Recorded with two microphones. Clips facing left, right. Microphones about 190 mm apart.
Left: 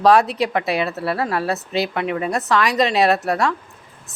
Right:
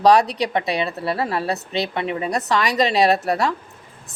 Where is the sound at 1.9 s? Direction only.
30° right (ahead or behind).